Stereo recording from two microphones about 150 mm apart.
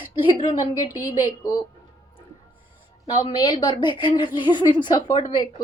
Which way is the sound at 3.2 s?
30° left (ahead or behind).